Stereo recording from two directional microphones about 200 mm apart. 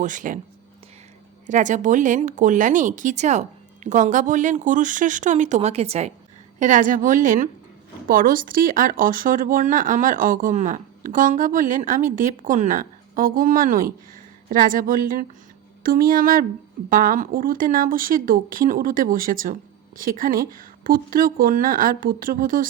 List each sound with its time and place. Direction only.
0.0 s speech: 40° right (ahead or behind)
1.5 s speech: 40° right (ahead or behind)